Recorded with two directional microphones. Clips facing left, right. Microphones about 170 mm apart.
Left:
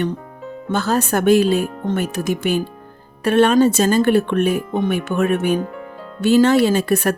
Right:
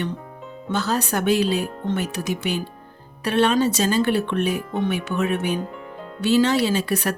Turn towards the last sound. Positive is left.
turn(degrees=50)  # may be behind; listen again after turning